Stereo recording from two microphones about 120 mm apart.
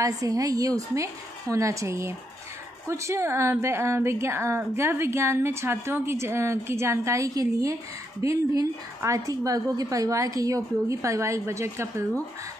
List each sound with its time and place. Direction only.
0.0 s a woman's voice: 30° right (ahead or behind)